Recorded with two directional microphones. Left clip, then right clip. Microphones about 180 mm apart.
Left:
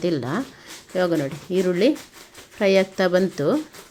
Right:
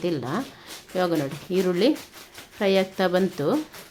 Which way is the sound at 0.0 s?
20° left (ahead or behind).